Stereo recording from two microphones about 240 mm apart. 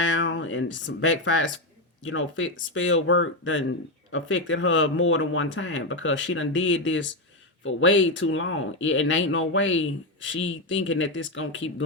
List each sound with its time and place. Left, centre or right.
0.0 s speech: left